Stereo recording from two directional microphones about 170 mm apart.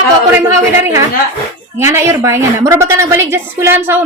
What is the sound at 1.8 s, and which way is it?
A woman's voice, 15° right (ahead or behind).